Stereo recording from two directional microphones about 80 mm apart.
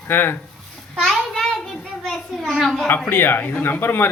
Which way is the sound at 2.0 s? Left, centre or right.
Centre.